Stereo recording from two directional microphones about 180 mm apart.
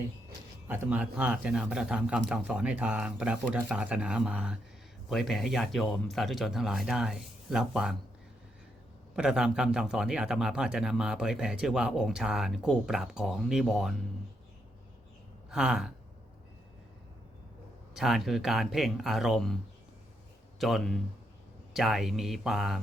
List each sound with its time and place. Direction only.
0.7 s speech: 10° right (ahead or behind)
9.1 s speech: 5° right (ahead or behind)
15.4 s speech: 5° right (ahead or behind)
17.9 s speech: centre (ahead or behind)
20.6 s speech: centre (ahead or behind)